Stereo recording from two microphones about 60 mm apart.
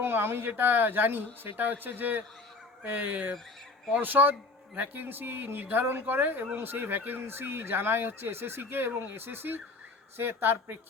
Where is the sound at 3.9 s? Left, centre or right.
Right.